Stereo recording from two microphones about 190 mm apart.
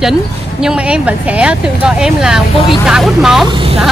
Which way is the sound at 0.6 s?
5° right (ahead or behind).